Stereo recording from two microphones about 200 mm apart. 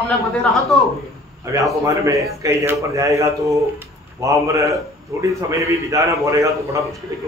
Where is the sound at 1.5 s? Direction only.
15° right (ahead or behind).